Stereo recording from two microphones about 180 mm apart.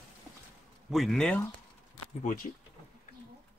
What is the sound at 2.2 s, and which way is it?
Speech, 50° left (ahead or behind).